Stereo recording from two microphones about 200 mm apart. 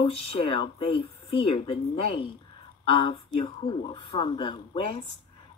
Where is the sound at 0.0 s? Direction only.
25° left (ahead or behind).